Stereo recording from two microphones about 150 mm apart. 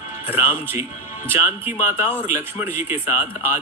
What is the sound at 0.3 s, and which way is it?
Speech, 15° right (ahead or behind).